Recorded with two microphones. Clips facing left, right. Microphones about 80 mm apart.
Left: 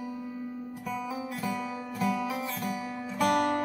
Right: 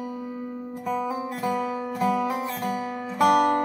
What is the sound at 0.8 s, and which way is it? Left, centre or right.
Music, right.